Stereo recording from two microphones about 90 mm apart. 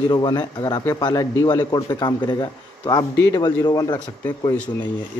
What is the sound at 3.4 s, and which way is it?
Speech, 45° left (ahead or behind).